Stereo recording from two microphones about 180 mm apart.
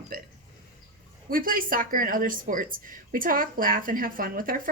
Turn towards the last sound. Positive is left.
turn(degrees=-50)  # may be behind; listen again after turning